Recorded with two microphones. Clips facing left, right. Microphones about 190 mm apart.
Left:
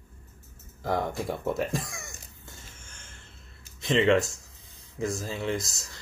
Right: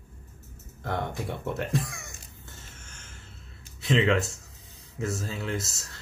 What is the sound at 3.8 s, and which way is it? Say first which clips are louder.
Speech: left 2 dB; centre (ahead or behind).